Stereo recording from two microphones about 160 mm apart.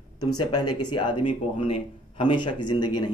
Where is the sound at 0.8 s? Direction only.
30° left (ahead or behind).